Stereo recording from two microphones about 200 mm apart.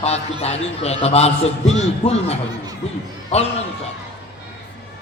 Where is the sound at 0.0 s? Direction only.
30° left (ahead or behind).